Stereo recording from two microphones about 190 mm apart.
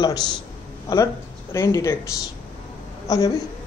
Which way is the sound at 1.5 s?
15° left (ahead or behind).